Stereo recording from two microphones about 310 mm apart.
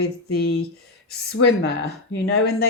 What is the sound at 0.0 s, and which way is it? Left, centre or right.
Speech, left.